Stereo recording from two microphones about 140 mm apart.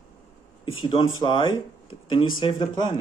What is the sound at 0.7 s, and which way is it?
Speech, 40° left (ahead or behind).